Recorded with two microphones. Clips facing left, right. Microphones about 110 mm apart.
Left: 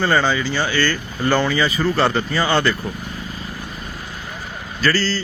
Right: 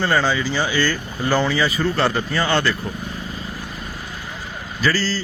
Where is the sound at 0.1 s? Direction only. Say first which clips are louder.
Left 1 dB; centre (ahead or behind).